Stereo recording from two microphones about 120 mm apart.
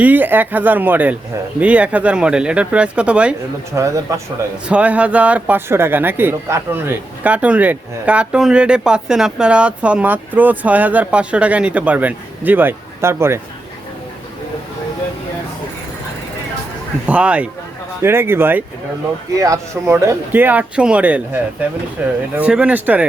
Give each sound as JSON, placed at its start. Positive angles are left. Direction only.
{"t": 0.0, "sound": "speech", "side_deg": -15}
{"t": 3.7, "sound": "speech", "side_deg": -25}
{"t": 4.7, "sound": "speech", "side_deg": -10}
{"t": 17.1, "sound": "speech", "side_deg": -10}